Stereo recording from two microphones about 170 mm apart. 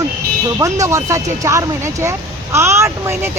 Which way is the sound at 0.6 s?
20° right (ahead or behind).